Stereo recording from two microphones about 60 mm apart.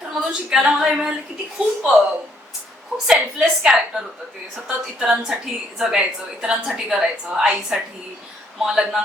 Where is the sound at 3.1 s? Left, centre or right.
Centre.